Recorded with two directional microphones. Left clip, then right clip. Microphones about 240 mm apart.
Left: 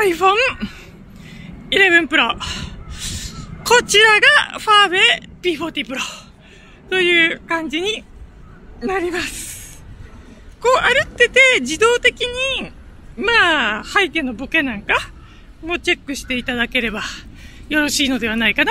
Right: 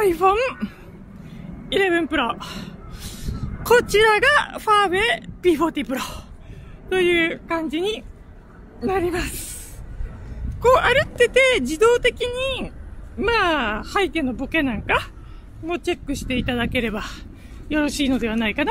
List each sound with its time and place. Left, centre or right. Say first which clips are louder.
0.0 s a woman's voice: left 3 dB; centre
5.4 s speech: right 2 dB; right
6.9 s a woman's voice: left 5 dB; centre
10.6 s speech: left 1 dB; centre